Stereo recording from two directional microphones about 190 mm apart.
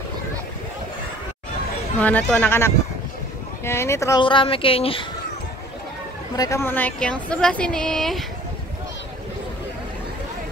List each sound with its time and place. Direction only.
2.0 s speech: 10° left (ahead or behind)
4.2 s speech: 25° left (ahead or behind)
6.3 s speech: 15° left (ahead or behind); by 8.3 s centre (ahead or behind)